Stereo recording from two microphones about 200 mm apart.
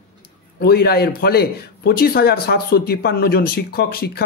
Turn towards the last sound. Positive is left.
turn(degrees=50)  # may be behind; listen again after turning